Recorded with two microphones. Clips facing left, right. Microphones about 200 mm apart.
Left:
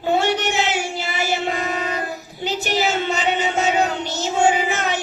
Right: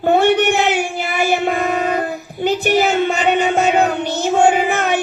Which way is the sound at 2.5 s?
55° right (ahead or behind).